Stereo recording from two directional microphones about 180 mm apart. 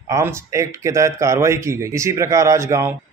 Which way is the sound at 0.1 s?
15° right (ahead or behind).